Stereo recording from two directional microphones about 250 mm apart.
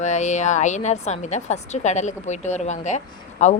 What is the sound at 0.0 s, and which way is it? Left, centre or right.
A woman's voice, left.